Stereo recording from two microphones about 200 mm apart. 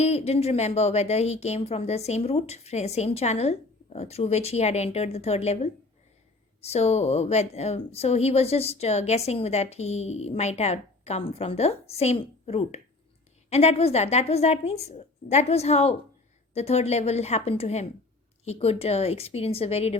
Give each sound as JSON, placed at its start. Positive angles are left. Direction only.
{"t": 0.0, "sound": "a woman's voice", "side_deg": 30}
{"t": 6.6, "sound": "a woman's voice", "side_deg": 30}